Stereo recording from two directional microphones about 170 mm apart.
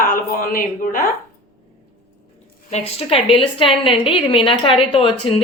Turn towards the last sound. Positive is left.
turn(degrees=35)  # may be behind; listen again after turning